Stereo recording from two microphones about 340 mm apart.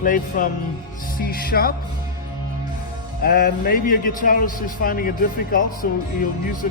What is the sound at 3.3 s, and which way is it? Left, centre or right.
A man's voice, left.